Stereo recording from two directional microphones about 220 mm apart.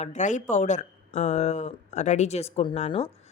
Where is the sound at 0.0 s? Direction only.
35° left (ahead or behind).